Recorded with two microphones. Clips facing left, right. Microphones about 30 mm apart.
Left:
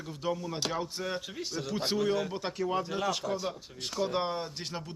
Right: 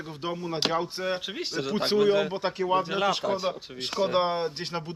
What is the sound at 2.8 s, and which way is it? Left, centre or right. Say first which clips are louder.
A man's voice: right 6 dB; right.